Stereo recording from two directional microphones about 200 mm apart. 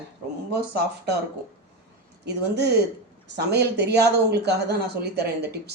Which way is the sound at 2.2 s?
55° right (ahead or behind).